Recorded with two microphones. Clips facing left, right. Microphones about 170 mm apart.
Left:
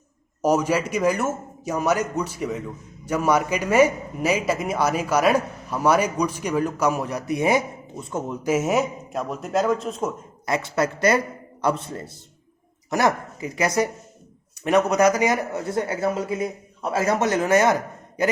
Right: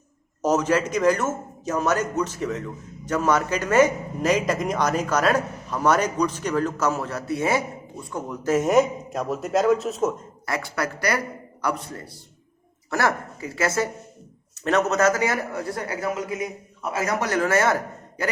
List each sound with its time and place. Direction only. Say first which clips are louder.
0.4 s a man's voice: even; 10° left (ahead or behind)
8.4 s a man's voice: right 3 dB; 5° left (ahead or behind)
10.4 s a man's voice: left 4 dB; 20° left (ahead or behind)